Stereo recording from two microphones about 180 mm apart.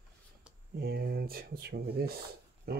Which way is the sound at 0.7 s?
55° right (ahead or behind).